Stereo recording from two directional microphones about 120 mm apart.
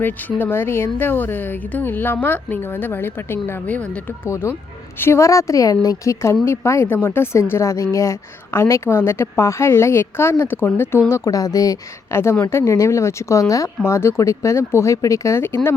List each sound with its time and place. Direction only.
0.0 s a woman's voice: 15° left (ahead or behind)